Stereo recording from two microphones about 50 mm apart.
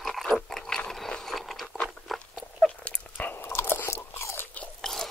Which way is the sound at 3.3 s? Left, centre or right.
Left.